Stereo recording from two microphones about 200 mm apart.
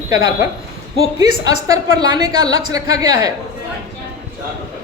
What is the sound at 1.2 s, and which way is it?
A woman's voice, 15° right (ahead or behind).